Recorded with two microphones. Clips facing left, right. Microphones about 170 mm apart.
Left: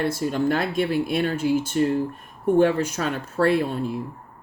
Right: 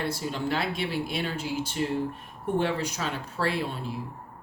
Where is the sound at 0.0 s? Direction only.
50° left (ahead or behind).